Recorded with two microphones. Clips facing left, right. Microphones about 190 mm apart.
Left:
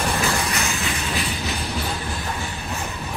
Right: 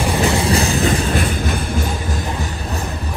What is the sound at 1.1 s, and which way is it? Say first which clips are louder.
Music: right 7 dB; 50° right (ahead or behind).